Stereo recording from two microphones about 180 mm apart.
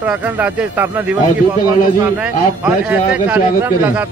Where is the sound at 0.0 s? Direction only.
10° right (ahead or behind).